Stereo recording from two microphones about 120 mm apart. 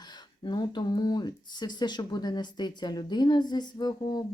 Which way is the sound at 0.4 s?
40° left (ahead or behind).